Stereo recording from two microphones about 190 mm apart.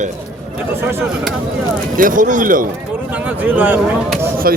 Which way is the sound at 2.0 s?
45° right (ahead or behind).